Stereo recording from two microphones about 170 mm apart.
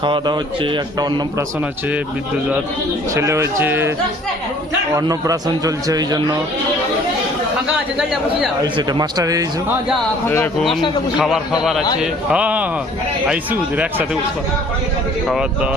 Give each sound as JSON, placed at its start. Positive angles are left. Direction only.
{"t": 0.0, "sound": "a man's voice", "side_deg": -30}
{"t": 3.2, "sound": "speech", "side_deg": -15}
{"t": 4.9, "sound": "a man's voice", "side_deg": -20}
{"t": 7.9, "sound": "speech", "side_deg": 0}
{"t": 8.6, "sound": "a man's voice", "side_deg": -25}
{"t": 10.2, "sound": "speech", "side_deg": 15}
{"t": 10.6, "sound": "speech", "side_deg": 0}
{"t": 12.3, "sound": "speech", "side_deg": -10}
{"t": 15.3, "sound": "speech", "side_deg": -5}